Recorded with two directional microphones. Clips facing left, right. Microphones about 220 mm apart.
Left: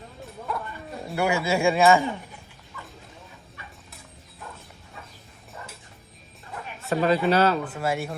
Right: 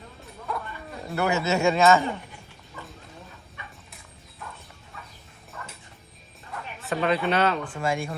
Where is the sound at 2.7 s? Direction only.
30° right (ahead or behind).